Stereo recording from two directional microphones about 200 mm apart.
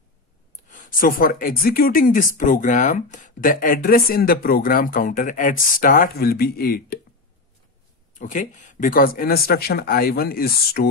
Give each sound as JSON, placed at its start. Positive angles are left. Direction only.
{"t": 0.7, "sound": "speech", "side_deg": 45}
{"t": 8.1, "sound": "speech", "side_deg": 40}